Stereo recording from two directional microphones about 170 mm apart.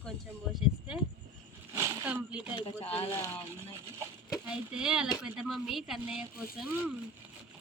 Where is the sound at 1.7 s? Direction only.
15° right (ahead or behind).